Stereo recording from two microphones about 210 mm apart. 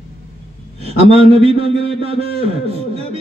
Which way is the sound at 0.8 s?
30° right (ahead or behind).